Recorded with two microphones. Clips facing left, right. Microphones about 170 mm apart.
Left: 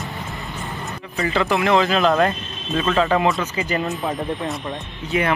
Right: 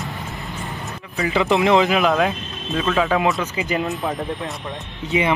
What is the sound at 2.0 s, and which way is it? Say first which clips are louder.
Speech: left 1 dB; centre (ahead or behind).